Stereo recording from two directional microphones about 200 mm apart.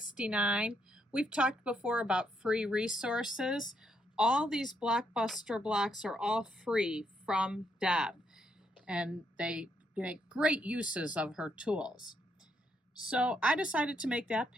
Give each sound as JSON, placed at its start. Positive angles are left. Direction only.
{"t": 0.0, "sound": "a woman's voice", "side_deg": -5}
{"t": 13.0, "sound": "a woman's voice", "side_deg": -5}